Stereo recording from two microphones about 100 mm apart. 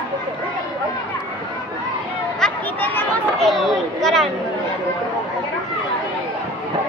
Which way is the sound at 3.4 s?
Centre (ahead or behind).